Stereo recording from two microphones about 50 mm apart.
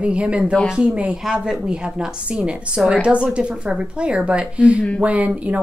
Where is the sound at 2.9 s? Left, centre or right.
Right.